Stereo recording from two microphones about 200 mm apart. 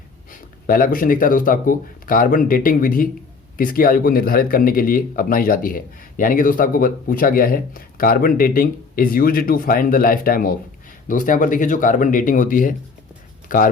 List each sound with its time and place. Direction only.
0.3 s speech: 45° left (ahead or behind)